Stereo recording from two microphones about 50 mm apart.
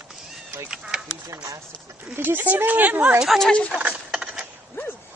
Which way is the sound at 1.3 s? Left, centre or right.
Right.